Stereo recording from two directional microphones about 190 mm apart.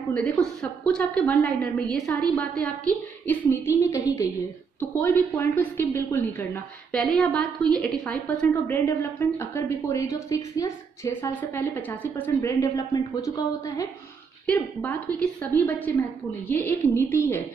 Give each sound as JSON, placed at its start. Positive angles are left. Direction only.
{"t": 0.1, "sound": "a woman's voice", "side_deg": 5}
{"t": 14.4, "sound": "a woman's voice", "side_deg": 5}